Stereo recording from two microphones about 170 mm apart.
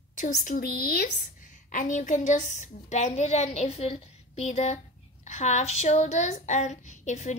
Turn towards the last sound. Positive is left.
turn(degrees=45)  # may be behind; listen again after turning